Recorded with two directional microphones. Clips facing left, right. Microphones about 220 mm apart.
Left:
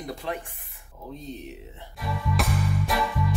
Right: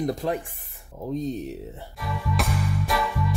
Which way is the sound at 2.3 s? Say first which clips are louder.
Even; centre (ahead or behind).